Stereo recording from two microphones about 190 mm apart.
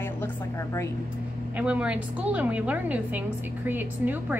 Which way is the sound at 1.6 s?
5° right (ahead or behind).